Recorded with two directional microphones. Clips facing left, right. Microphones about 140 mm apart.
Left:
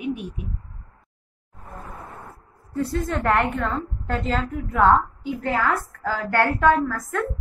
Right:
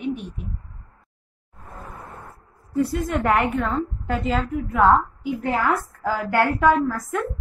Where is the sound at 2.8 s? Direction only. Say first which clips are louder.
Right 2 dB; centre (ahead or behind).